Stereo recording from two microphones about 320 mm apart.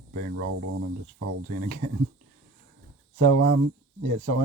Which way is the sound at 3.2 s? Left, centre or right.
Right.